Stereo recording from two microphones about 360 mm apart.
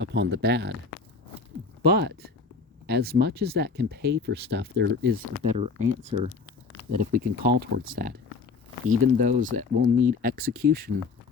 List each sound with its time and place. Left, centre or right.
0.0 s speech: right
1.8 s speech: right
9.1 s speech: right